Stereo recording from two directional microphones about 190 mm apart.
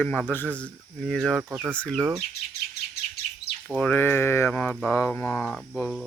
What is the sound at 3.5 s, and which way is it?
Bird, 60° left (ahead or behind).